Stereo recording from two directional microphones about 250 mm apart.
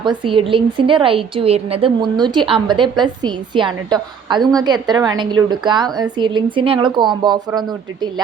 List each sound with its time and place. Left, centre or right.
0.0 s a woman's voice: centre